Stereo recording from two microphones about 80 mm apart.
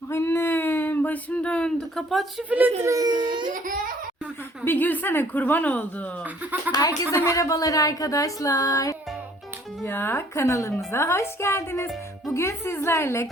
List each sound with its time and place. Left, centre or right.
0.1 s speech: left; by 2.2 s centre
2.5 s speech: right
2.8 s speech: right
4.6 s a woman's voice: left
6.7 s speech: left
7.1 s speech: left
9.8 s a woman's voice: left